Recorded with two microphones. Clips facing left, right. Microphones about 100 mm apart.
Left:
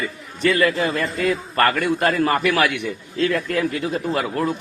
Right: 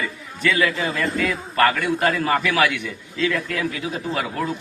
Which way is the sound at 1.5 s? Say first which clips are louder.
Right 2 dB; 50° left (ahead or behind).